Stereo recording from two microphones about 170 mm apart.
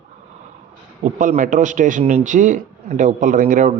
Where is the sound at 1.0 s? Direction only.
45° right (ahead or behind).